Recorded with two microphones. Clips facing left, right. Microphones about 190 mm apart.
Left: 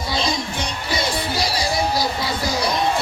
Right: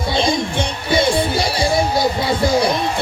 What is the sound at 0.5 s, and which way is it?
Music, 30° right (ahead or behind).